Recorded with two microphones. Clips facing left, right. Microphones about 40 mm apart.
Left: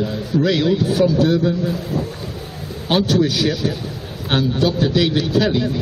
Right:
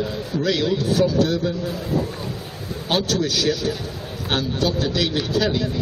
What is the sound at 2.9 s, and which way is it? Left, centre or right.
A man's voice, centre.